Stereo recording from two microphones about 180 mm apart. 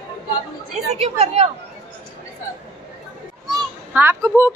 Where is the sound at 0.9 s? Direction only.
35° right (ahead or behind).